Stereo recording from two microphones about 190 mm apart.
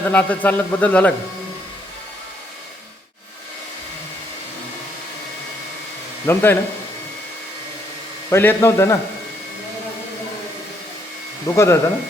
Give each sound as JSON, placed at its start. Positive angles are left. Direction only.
{"t": 0.0, "sound": "a man's voice", "side_deg": 10}
{"t": 6.2, "sound": "a man's voice", "side_deg": 10}
{"t": 8.3, "sound": "a man's voice", "side_deg": 10}
{"t": 11.4, "sound": "a man's voice", "side_deg": 15}